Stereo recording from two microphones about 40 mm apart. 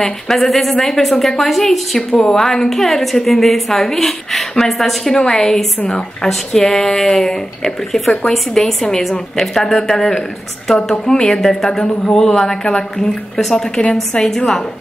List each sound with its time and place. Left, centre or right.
0.0 s a woman's voice: centre
5.1 s speech: centre
13.4 s a woman's voice: centre